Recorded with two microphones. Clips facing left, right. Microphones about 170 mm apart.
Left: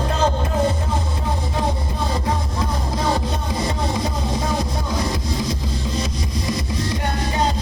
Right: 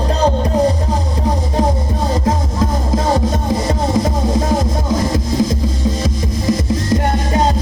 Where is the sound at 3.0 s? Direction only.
45° right (ahead or behind).